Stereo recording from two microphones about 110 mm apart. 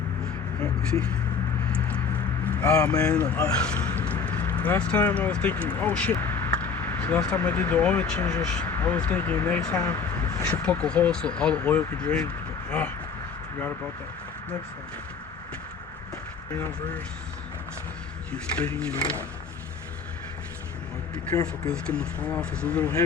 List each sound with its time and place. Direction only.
0.6 s speech: 10° left (ahead or behind)
1.7 s a sound: 10° left (ahead or behind)
2.7 s speech: 10° left (ahead or behind)
10.2 s a sound: 25° left (ahead or behind)
10.5 s speech: 10° left (ahead or behind)
18.3 s speech: 10° left (ahead or behind)
21.3 s speech: 30° left (ahead or behind)
21.7 s speech: 10° left (ahead or behind)